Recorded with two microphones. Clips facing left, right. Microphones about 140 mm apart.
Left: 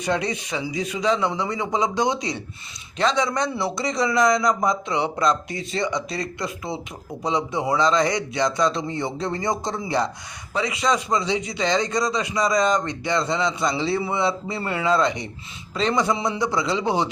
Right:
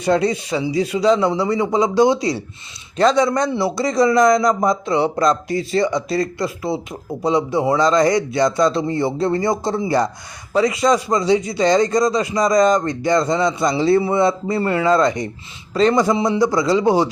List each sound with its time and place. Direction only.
0.0 s a man's voice: 35° right (ahead or behind)